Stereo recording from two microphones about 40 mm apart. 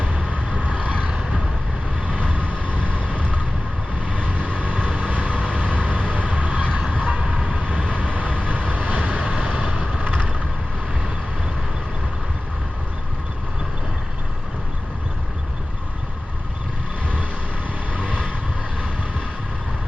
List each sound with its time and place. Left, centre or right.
0.5 s vehicle: right
2.8 s vehicle: right
4.3 s vehicle: right
7.2 s vehicle: right
8.1 s vehicle: right
9.3 s vehicle: centre
17.9 s vehicle: right